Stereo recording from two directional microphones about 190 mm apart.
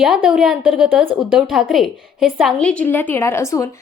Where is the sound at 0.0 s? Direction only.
5° right (ahead or behind).